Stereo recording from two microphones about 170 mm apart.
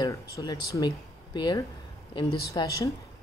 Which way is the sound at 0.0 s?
20° left (ahead or behind).